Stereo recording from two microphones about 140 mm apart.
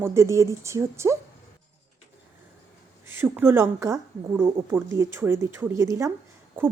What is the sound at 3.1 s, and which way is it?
A woman's voice, 15° right (ahead or behind).